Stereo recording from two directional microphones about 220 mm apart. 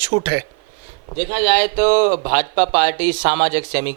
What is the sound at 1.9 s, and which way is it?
Speech, 35° right (ahead or behind).